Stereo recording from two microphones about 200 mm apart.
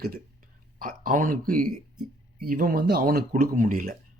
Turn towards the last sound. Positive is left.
turn(degrees=-45)  # may be behind; listen again after turning